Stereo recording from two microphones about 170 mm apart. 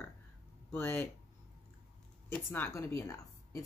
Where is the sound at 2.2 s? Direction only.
10° left (ahead or behind).